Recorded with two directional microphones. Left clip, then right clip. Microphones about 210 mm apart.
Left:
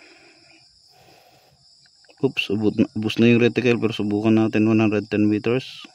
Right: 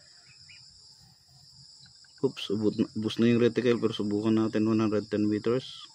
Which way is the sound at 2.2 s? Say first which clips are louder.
Left 7 dB; 45° left (ahead or behind).